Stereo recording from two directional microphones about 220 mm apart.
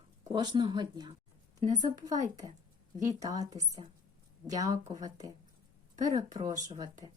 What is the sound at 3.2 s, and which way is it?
Speech, 15° right (ahead or behind).